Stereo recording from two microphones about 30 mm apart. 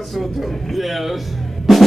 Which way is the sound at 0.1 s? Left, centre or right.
Centre.